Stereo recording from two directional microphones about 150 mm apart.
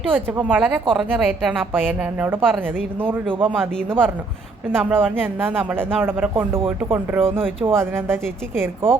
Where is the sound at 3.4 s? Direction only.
10° right (ahead or behind).